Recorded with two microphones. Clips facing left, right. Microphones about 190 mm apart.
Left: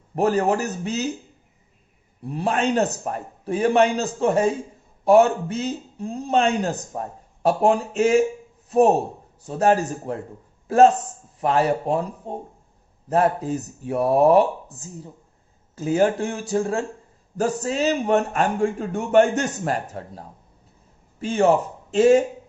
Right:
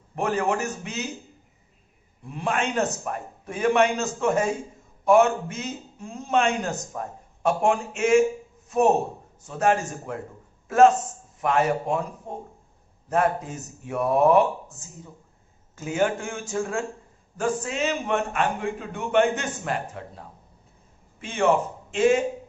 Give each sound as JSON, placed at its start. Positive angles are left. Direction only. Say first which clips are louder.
{"t": 0.2, "sound": "speech", "louder": "left 5 dB", "side_deg": 35}
{"t": 2.2, "sound": "speech", "louder": "left 4 dB", "side_deg": 35}
{"t": 9.4, "sound": "a man's voice", "louder": "left 4 dB", "side_deg": 35}